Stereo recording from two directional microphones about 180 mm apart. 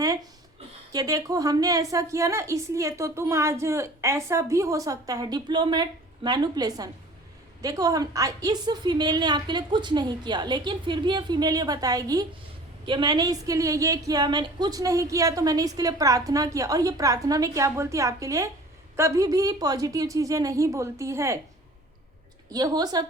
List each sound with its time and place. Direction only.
0.9 s a woman's voice: 20° right (ahead or behind)
22.5 s a woman's voice: 20° right (ahead or behind)